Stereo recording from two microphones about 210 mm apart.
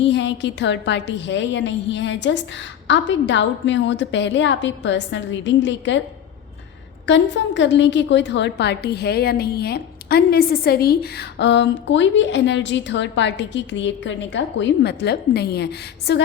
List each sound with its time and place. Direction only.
0.0 s a woman's voice: 60° left (ahead or behind)
7.0 s a woman's voice: 60° left (ahead or behind)